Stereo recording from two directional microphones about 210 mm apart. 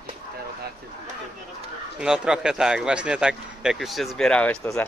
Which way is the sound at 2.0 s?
5° right (ahead or behind).